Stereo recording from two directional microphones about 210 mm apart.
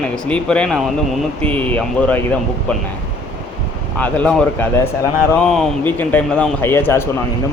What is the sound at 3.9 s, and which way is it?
A man's voice, 5° left (ahead or behind).